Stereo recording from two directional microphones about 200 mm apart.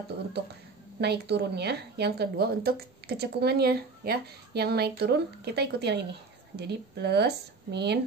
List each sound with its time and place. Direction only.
1.0 s a woman's voice: 55° right (ahead or behind)